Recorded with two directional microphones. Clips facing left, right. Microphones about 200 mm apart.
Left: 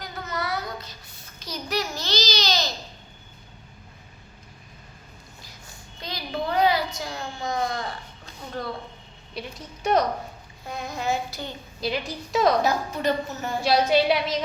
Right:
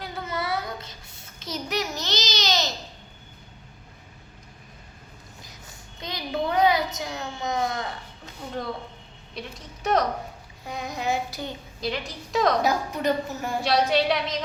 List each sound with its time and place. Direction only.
0.0 s child singing: 25° right (ahead or behind)
6.0 s a sound: 20° right (ahead or behind)
9.4 s a woman's voice: 5° left (ahead or behind)
10.7 s a woman's voice: 15° right (ahead or behind)
11.8 s a woman's voice: 5° left (ahead or behind)
12.6 s a woman's voice: 15° right (ahead or behind)
13.6 s a woman's voice: 5° left (ahead or behind)